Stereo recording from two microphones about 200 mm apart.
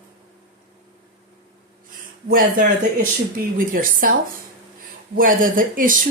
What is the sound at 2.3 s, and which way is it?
Speech, 40° right (ahead or behind).